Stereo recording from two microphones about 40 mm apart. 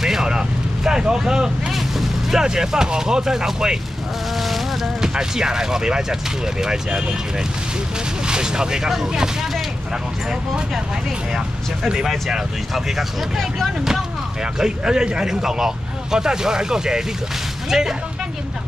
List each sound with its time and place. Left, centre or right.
0.0 s vehicle: centre
0.8 s speech: centre
1.8 s vehicle: centre
2.4 s speech: centre
5.0 s speech: centre
8.3 s speech: centre
11.3 s speech: centre
12.7 s speech: centre
14.6 s speech: centre